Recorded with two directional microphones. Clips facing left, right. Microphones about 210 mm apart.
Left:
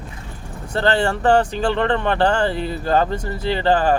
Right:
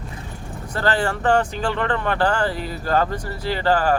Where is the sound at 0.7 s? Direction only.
25° left (ahead or behind).